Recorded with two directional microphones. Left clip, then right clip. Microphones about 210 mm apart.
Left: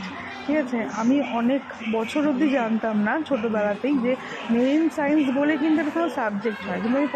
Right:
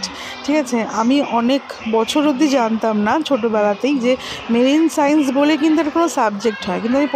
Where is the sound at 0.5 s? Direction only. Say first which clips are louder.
Right 7 dB; 40° right (ahead or behind).